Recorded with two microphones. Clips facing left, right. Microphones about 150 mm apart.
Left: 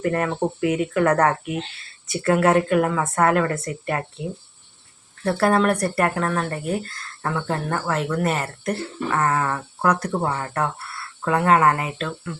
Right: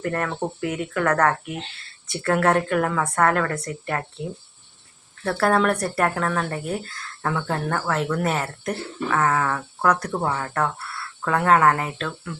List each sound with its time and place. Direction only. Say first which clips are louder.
0.0 s speech: left 4 dB; 15° left (ahead or behind)
5.2 s speech: left 1 dB; 10° left (ahead or behind)